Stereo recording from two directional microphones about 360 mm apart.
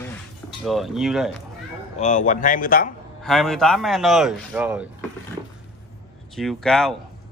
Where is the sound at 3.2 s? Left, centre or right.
Centre.